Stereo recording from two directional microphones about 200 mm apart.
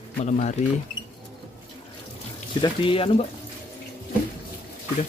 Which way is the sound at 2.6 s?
25° left (ahead or behind).